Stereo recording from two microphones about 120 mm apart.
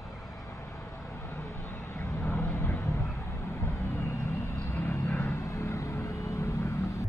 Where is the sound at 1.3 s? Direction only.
25° left (ahead or behind).